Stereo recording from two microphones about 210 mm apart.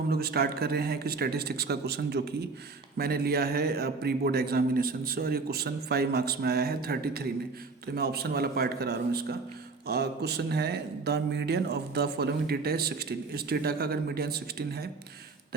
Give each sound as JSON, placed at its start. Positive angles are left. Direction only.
{"t": 0.1, "sound": "speech", "side_deg": -50}